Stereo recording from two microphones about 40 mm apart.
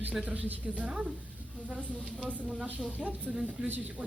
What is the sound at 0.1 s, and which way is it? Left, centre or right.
Speech, right.